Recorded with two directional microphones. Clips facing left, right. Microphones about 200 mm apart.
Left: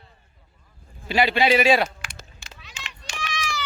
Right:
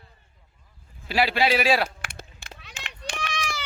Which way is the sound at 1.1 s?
5° right (ahead or behind).